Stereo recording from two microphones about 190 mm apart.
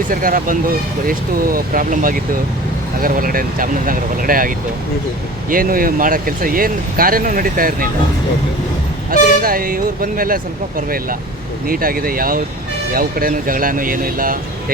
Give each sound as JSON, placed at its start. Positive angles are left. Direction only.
{"t": 0.1, "sound": "speech", "side_deg": -50}
{"t": 9.0, "sound": "speech", "side_deg": -50}